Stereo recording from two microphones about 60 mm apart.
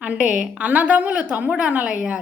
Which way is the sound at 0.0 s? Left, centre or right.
Right.